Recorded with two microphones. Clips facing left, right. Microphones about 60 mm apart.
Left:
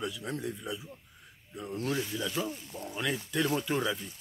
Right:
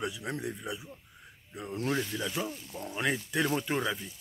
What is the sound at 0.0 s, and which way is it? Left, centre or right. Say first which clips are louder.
Speech: even; centre.